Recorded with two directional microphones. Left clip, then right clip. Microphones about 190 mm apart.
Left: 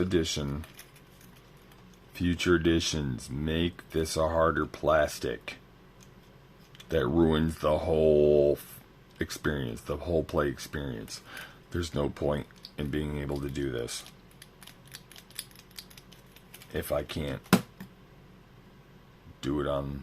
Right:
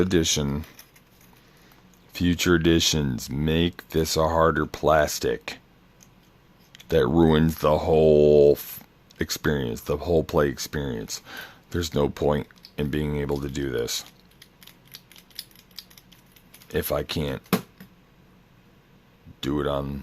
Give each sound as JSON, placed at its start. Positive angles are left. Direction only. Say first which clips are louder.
{"t": 0.0, "sound": "speech", "louder": "right 6 dB", "side_deg": -50}
{"t": 2.1, "sound": "speech", "louder": "right 5 dB", "side_deg": -40}
{"t": 6.8, "sound": "speech", "louder": "right 6 dB", "side_deg": -40}
{"t": 16.7, "sound": "speech", "louder": "right 5 dB", "side_deg": -40}
{"t": 19.4, "sound": "speech", "louder": "right 4 dB", "side_deg": -40}